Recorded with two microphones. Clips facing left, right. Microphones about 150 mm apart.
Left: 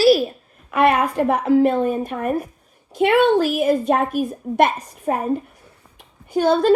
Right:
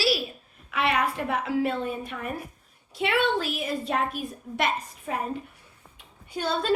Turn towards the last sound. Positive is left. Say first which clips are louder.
# left 12 dB
turn(degrees=45)  # may be behind; listen again after turning